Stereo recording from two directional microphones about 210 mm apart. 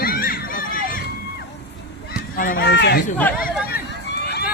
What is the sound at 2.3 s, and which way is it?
Speech, 45° left (ahead or behind).